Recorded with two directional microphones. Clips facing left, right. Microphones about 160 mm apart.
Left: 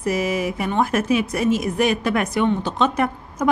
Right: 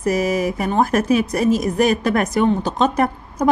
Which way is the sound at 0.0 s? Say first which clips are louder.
Right 3 dB; 40° right (ahead or behind).